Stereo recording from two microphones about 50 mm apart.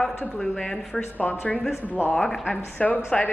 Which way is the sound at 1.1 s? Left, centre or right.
Left.